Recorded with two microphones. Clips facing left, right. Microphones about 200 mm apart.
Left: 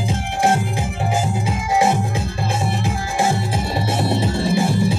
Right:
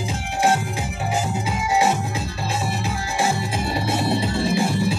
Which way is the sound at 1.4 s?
50° left (ahead or behind).